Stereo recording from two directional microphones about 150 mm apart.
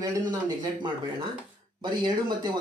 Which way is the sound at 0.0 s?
25° right (ahead or behind).